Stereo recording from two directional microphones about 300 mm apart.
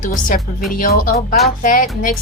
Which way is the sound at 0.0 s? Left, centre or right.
Left.